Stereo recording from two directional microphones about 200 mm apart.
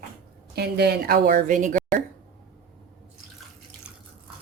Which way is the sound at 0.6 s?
55° right (ahead or behind).